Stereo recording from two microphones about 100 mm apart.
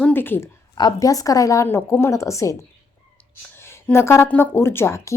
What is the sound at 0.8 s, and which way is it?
A woman's voice, 40° left (ahead or behind).